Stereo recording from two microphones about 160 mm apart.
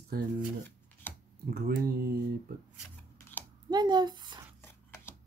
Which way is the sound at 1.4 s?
70° right (ahead or behind).